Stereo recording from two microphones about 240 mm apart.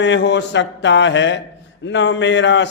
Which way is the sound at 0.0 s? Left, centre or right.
Left.